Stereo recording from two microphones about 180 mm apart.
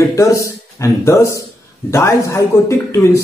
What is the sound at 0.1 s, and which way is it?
A man's voice, 15° left (ahead or behind).